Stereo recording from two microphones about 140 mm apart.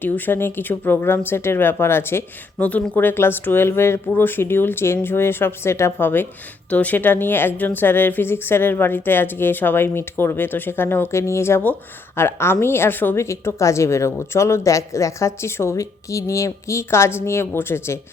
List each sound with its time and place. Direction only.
0.0 s speech: 15° left (ahead or behind)